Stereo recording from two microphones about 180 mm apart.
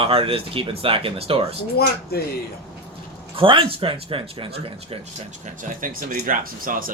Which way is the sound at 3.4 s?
30° right (ahead or behind).